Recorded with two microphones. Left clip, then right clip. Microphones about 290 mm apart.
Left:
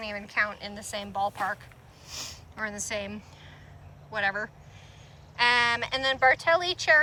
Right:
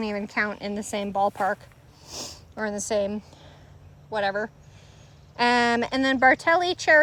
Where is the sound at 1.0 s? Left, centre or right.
Right.